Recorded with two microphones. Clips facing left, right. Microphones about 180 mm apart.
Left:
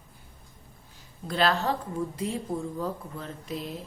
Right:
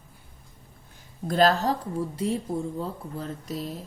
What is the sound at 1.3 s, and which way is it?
A woman's voice, 40° right (ahead or behind).